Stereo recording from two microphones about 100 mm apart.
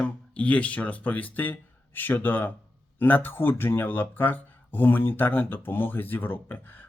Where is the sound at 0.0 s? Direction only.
15° left (ahead or behind).